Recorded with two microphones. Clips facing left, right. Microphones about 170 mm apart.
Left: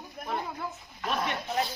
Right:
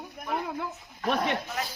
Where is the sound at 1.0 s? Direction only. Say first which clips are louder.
Right 4 dB; 60° right (ahead or behind).